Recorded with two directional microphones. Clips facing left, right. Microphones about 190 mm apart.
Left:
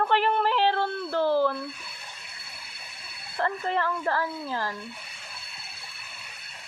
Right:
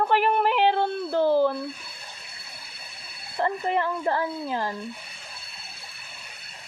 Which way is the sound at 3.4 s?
15° right (ahead or behind).